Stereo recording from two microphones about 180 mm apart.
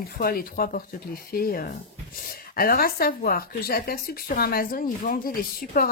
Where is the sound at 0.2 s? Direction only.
55° left (ahead or behind).